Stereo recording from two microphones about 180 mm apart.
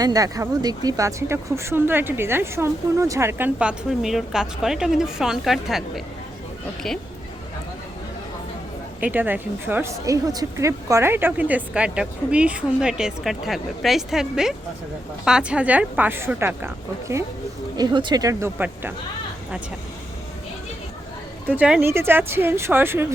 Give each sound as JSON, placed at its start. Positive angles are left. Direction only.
{"t": 0.0, "sound": "speech", "side_deg": -20}
{"t": 9.1, "sound": "speech", "side_deg": -10}
{"t": 21.4, "sound": "speech", "side_deg": -10}